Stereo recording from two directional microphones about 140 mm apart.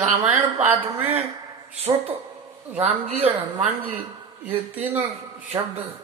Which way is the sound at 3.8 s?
10° right (ahead or behind).